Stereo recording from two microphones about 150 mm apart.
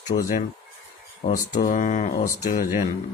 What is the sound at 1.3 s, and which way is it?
Speech, 65° left (ahead or behind).